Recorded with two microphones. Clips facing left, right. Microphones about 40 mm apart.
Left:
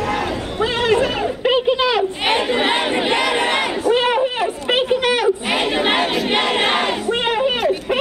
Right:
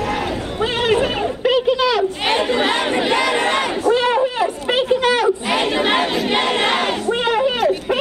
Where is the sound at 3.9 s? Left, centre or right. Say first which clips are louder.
Even; left.